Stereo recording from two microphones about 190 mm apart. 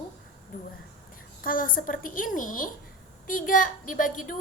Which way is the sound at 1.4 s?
50° left (ahead or behind).